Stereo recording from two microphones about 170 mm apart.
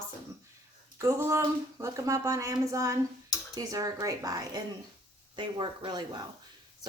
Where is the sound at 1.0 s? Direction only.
15° right (ahead or behind).